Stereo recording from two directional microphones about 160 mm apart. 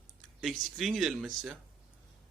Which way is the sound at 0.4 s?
Centre (ahead or behind).